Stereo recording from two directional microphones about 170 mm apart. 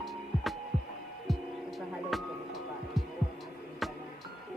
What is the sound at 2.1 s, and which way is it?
Music, centre (ahead or behind).